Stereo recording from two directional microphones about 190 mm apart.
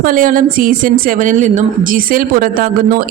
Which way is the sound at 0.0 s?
45° right (ahead or behind).